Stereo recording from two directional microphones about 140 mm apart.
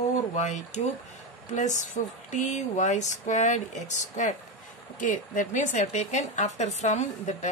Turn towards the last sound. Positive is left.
turn(degrees=55)  # may be behind; listen again after turning